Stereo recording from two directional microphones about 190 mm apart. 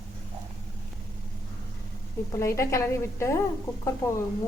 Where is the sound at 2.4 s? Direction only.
15° left (ahead or behind).